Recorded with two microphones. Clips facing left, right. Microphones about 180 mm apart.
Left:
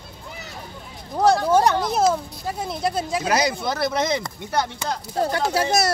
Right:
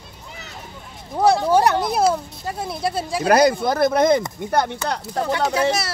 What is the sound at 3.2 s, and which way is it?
Speech, 55° right (ahead or behind).